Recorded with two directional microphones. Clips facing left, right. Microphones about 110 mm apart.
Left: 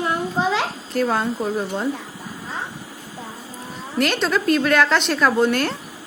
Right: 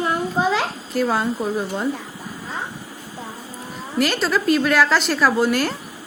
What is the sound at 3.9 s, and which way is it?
A woman's voice, centre (ahead or behind).